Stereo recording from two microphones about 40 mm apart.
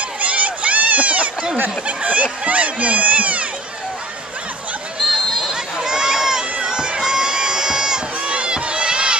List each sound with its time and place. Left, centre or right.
0.2 s a sound: right
1.9 s speech: right
5.0 s crowd: centre
8.2 s crowd: right